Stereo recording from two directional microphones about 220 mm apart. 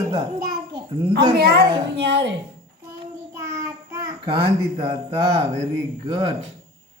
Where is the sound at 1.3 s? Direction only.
45° right (ahead or behind).